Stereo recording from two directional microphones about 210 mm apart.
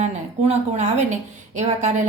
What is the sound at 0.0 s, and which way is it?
A woman's voice, 30° right (ahead or behind).